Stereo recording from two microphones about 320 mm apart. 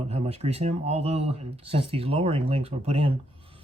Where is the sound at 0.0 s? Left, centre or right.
Centre.